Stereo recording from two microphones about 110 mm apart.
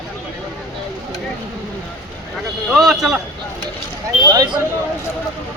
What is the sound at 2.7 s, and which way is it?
Speech, centre (ahead or behind).